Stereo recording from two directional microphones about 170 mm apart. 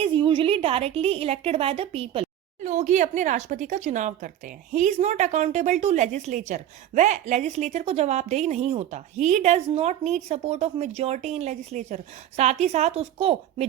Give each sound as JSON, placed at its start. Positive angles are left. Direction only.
{"t": 0.0, "sound": "a woman's voice", "side_deg": -30}